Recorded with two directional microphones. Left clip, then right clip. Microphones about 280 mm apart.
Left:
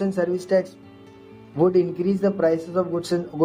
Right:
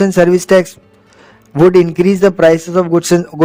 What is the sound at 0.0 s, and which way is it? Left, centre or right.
Speech, right.